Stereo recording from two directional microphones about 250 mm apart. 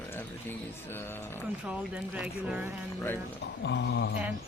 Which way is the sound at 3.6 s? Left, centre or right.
Left.